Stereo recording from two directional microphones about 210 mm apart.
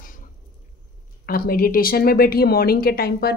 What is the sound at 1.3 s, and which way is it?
A woman's voice, 45° left (ahead or behind).